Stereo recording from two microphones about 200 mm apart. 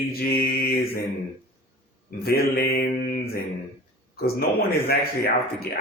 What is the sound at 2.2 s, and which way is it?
Speech, 50° left (ahead or behind).